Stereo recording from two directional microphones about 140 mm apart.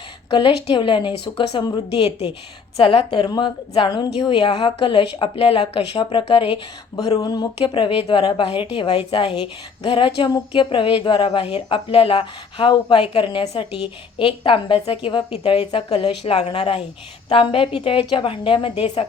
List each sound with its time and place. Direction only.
0.3 s a woman's voice: 35° left (ahead or behind)
2.0 s a woman's voice: 45° left (ahead or behind)
3.1 s a woman's voice: 35° left (ahead or behind)
7.2 s a woman's voice: 30° left (ahead or behind)